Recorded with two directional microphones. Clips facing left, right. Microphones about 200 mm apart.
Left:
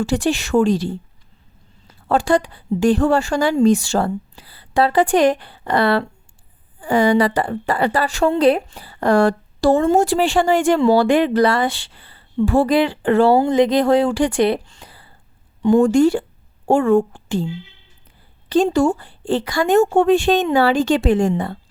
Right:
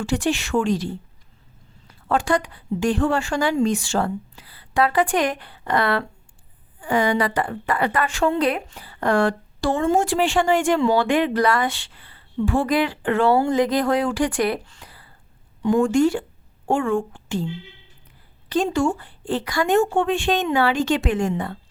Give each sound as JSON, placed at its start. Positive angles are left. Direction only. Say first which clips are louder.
{"t": 0.0, "sound": "a woman's voice", "louder": "left 3 dB", "side_deg": 35}
{"t": 2.0, "sound": "a woman's voice", "louder": "left 4 dB", "side_deg": 30}
{"t": 13.4, "sound": "a woman's voice", "louder": "left 4 dB", "side_deg": 20}